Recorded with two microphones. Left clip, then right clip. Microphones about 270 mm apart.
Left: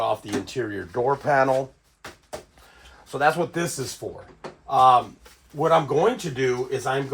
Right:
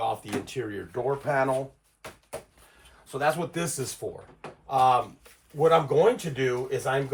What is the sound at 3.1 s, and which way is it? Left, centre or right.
Speech, centre.